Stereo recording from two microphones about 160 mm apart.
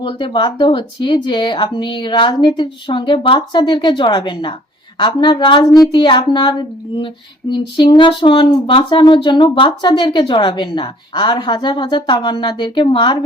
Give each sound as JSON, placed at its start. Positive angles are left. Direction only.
{"t": 0.0, "sound": "speech", "side_deg": 30}